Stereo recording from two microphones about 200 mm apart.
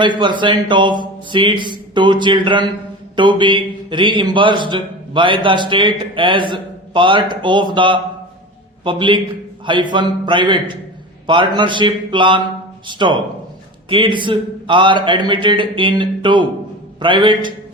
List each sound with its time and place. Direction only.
0.0 s a man's voice: 20° right (ahead or behind)